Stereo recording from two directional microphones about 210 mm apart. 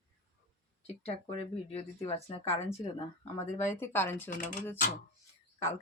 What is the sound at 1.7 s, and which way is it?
Speech, 30° left (ahead or behind).